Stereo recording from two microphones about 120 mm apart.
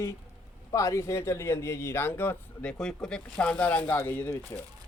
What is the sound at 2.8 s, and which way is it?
Speech, 5° left (ahead or behind).